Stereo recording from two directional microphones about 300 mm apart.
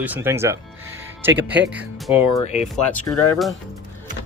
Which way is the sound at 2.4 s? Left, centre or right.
Left.